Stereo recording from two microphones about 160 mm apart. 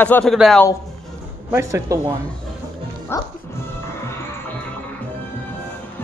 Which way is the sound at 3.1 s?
15° left (ahead or behind).